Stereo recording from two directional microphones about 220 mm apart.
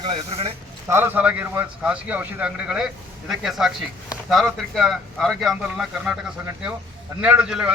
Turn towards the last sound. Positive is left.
turn(degrees=-5)  # may be behind; listen again after turning